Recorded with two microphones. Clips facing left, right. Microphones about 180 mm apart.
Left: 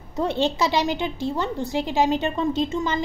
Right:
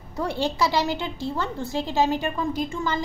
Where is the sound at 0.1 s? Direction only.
20° left (ahead or behind).